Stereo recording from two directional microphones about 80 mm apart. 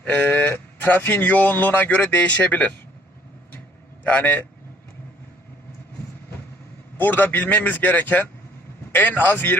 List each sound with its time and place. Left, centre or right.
0.0 s speech: left
4.0 s speech: left
6.9 s speech: left